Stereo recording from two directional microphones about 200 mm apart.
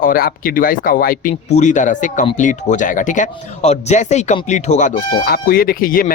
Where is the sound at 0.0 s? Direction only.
45° left (ahead or behind).